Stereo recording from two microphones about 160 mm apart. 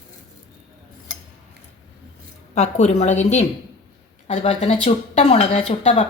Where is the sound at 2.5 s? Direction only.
45° left (ahead or behind).